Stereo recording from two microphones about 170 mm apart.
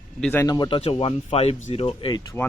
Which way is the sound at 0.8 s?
35° left (ahead or behind).